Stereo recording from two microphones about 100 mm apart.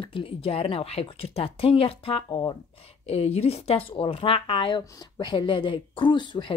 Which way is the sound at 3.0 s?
90° left.